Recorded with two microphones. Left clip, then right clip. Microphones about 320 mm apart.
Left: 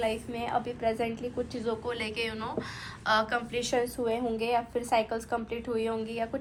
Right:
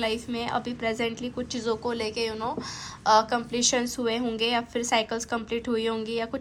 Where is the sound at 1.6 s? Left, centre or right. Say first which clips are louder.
Right 7 dB; centre.